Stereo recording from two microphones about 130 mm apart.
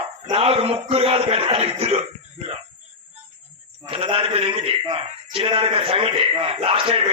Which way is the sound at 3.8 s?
45° right (ahead or behind).